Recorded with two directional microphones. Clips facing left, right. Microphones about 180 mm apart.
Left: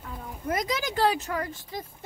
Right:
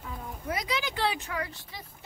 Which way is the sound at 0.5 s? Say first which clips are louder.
Left 4 dB; 45° left (ahead or behind).